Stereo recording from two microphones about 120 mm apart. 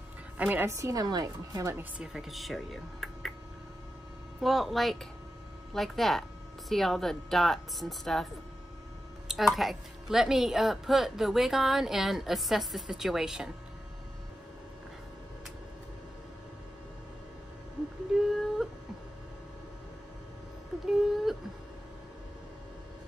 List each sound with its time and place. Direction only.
0.4 s a woman's voice: 15° right (ahead or behind)
1.8 s speech: 5° right (ahead or behind)
4.4 s a woman's voice: centre (ahead or behind)
9.3 s a woman's voice: centre (ahead or behind)
18.1 s a sound: centre (ahead or behind)
20.8 s a sound: 5° right (ahead or behind)